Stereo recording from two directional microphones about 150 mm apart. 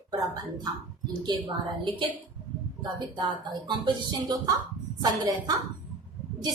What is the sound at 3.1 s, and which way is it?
Speech, 30° right (ahead or behind).